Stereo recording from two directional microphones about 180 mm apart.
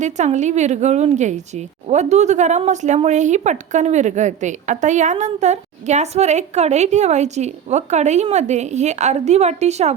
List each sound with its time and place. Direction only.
0.0 s a woman's voice: 40° right (ahead or behind)